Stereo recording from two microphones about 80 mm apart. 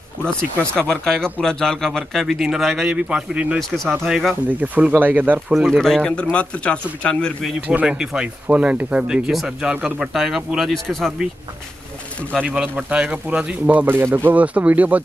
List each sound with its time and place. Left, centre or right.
0.2 s speech: centre
2.9 s speech: centre
3.5 s speech: centre
4.5 s speech: centre
5.5 s speech: centre
7.6 s speech: centre
9.9 s speech: centre
12.2 s speech: centre
12.6 s speech: centre